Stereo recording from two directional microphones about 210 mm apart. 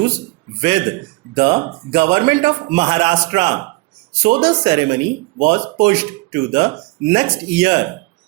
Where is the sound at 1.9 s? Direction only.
20° right (ahead or behind).